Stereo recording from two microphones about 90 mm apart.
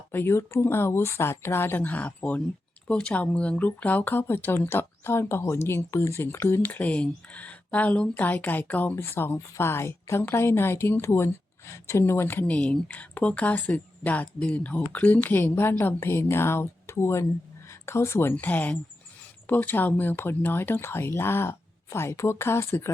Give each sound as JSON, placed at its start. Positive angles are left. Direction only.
{"t": 0.1, "sound": "a woman's voice", "side_deg": 25}